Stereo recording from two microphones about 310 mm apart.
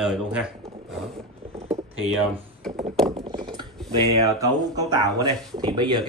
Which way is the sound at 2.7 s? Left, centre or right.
Right.